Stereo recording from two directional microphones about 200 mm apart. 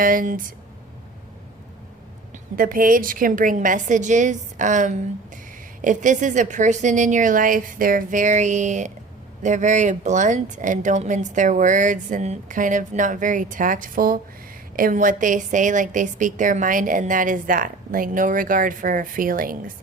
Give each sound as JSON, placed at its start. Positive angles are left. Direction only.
{"t": 0.0, "sound": "a woman's voice", "side_deg": -45}
{"t": 2.3, "sound": "a woman's voice", "side_deg": -45}